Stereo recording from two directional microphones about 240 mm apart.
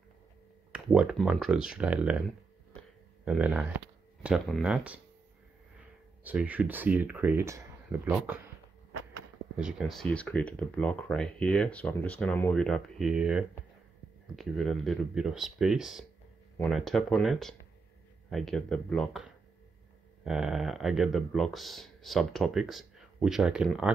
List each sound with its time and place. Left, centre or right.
0.7 s speech: centre
3.3 s speech: centre
6.2 s speech: centre
9.6 s speech: centre